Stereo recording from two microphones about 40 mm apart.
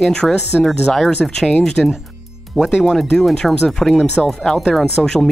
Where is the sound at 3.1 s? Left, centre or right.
Centre.